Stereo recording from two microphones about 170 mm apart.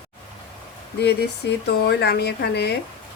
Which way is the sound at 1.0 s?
75° left (ahead or behind).